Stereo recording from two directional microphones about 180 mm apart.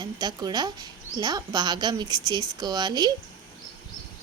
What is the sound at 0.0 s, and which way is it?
A woman's voice, 20° right (ahead or behind).